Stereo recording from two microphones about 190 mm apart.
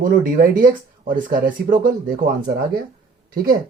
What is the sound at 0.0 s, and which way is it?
Speech, 45° right (ahead or behind).